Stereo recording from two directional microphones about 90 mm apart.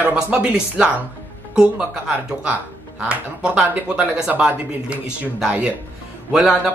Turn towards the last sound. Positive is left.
turn(degrees=-15)  # may be behind; listen again after turning